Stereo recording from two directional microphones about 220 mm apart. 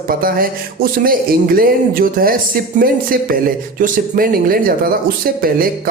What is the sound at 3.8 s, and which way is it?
Speech, 40° right (ahead or behind).